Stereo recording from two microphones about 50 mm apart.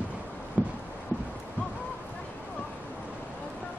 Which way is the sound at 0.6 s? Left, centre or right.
Right.